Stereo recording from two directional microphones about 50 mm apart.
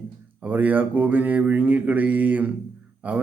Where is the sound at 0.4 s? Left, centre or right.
Right.